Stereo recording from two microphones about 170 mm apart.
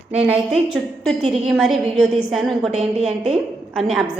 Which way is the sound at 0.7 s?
Centre (ahead or behind).